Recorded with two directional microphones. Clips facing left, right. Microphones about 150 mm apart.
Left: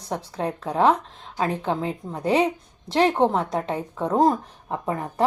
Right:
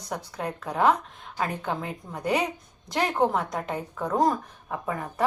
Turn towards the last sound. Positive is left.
turn(degrees=30)  # may be behind; listen again after turning